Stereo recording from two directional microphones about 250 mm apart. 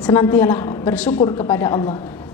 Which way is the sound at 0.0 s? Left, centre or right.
Centre.